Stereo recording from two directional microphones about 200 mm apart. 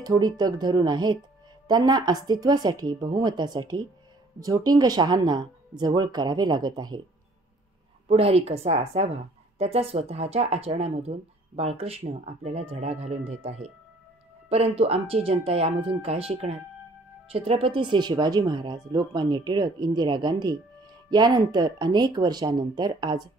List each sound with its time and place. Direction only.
0.0 s speech: 20° right (ahead or behind)
8.1 s a woman's voice: 30° right (ahead or behind)